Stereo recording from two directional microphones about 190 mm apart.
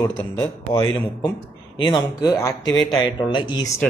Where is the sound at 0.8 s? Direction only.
20° left (ahead or behind).